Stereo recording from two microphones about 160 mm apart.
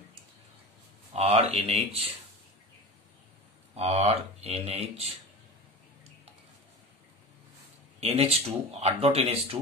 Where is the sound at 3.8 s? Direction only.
40° right (ahead or behind).